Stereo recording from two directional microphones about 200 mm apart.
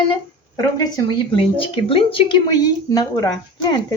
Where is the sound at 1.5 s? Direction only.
25° left (ahead or behind).